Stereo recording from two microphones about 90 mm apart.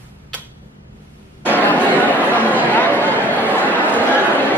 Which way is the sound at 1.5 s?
20° left (ahead or behind).